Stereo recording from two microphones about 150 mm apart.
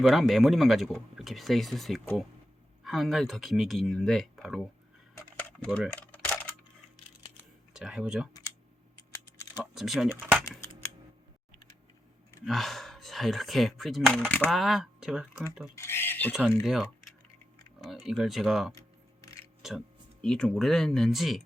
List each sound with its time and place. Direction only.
0.0 s speech: centre (ahead or behind)
5.1 s a sound: 10° left (ahead or behind)
6.0 s coin: 10° left (ahead or behind)
7.7 s speech: 5° right (ahead or behind)
9.7 s speech: centre (ahead or behind)
12.5 s speech: centre (ahead or behind)
14.3 s speech: 10° left (ahead or behind)
14.5 s speech: centre (ahead or behind)
15.7 s cutlery: 15° left (ahead or behind)
16.6 s speech: centre (ahead or behind)
19.2 s music: 20° left (ahead or behind)
20.2 s speech: 5° left (ahead or behind)